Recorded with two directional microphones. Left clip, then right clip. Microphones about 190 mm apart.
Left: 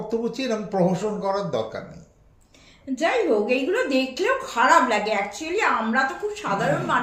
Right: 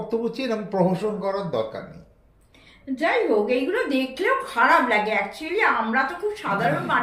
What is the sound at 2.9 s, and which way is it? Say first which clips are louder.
A woman's voice: even; 15° left (ahead or behind).